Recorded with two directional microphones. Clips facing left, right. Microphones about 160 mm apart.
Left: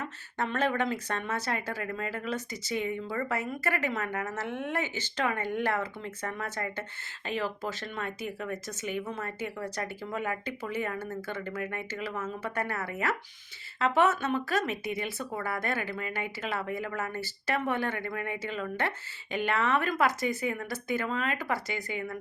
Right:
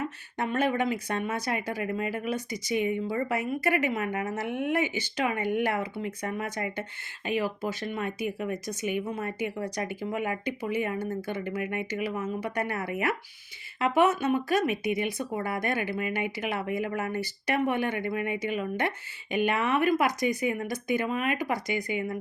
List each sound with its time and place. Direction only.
0.0 s speech: 15° right (ahead or behind)